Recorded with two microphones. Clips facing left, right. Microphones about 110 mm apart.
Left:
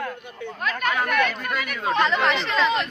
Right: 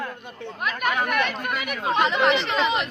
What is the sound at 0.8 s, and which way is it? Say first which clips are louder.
Speech: left 1 dB; 15° right (ahead or behind).